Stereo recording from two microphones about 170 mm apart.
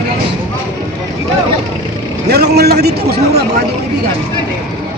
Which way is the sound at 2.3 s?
70° right (ahead or behind).